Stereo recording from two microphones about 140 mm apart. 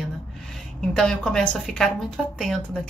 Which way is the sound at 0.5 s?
5° left (ahead or behind).